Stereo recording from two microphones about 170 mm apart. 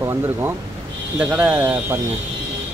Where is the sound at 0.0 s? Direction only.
15° right (ahead or behind).